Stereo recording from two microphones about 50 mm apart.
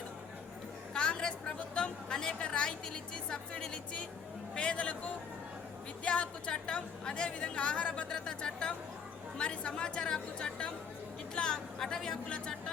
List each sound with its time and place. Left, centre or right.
0.9 s a woman's voice: centre